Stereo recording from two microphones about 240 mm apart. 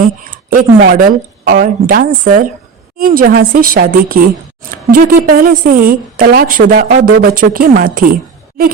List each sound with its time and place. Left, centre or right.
0.5 s a woman's voice: right